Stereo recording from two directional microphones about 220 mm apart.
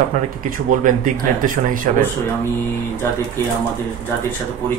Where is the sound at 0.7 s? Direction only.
35° right (ahead or behind).